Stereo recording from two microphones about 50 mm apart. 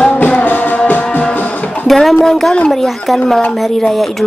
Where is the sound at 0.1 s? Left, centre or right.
Left.